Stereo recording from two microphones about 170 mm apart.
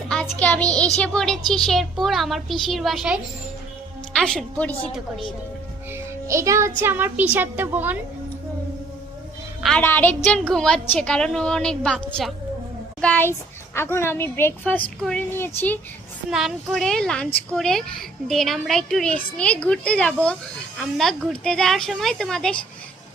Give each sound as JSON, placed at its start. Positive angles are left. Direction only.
{"t": 0.1, "sound": "a child's voice", "side_deg": 5}
{"t": 5.9, "sound": "a woman's voice", "side_deg": -15}
{"t": 9.6, "sound": "a woman's voice", "side_deg": 10}
{"t": 16.3, "sound": "speech", "side_deg": 0}